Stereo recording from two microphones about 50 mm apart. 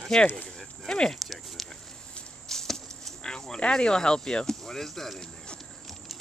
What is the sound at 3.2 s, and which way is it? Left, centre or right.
Speech, centre.